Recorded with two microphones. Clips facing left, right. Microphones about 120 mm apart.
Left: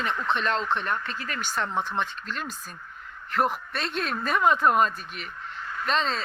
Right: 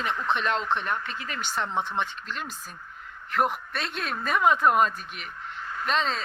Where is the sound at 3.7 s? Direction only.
5° right (ahead or behind).